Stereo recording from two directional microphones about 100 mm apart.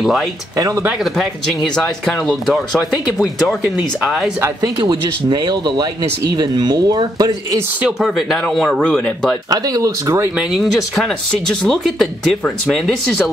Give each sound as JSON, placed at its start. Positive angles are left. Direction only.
{"t": 0.0, "sound": "speech", "side_deg": 0}
{"t": 0.6, "sound": "speech", "side_deg": -35}
{"t": 1.1, "sound": "speech", "side_deg": 0}
{"t": 4.6, "sound": "speech", "side_deg": -40}
{"t": 8.0, "sound": "speech", "side_deg": 0}
{"t": 9.5, "sound": "speech", "side_deg": -35}
{"t": 10.3, "sound": "speech", "side_deg": 0}